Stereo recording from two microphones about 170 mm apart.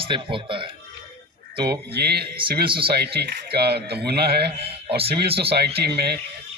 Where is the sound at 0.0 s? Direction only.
30° right (ahead or behind).